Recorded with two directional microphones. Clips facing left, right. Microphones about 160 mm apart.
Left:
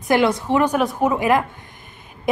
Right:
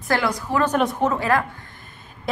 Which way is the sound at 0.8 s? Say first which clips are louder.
Left 1 dB; centre (ahead or behind).